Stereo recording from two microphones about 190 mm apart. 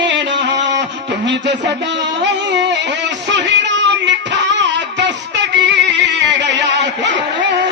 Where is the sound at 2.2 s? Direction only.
65° right (ahead or behind).